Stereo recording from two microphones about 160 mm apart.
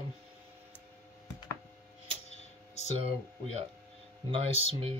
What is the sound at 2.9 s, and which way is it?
Speech, 40° right (ahead or behind).